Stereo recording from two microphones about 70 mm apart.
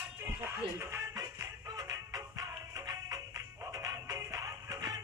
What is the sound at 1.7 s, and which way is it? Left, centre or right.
Music, right.